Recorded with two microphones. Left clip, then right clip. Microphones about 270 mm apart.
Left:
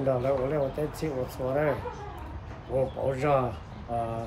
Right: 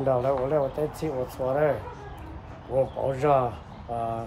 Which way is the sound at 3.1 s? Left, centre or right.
Centre.